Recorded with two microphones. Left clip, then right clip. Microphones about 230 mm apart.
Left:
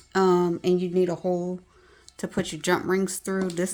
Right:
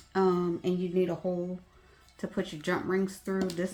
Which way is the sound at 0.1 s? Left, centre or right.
Left.